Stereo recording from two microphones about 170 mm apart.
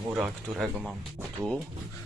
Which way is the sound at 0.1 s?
5° right (ahead or behind).